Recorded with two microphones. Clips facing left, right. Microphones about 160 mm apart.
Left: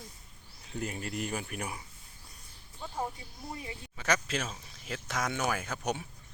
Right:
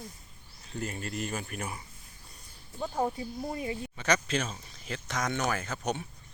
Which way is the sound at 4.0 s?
5° left (ahead or behind).